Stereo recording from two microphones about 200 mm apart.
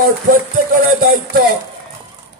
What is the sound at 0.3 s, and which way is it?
Music, 45° right (ahead or behind).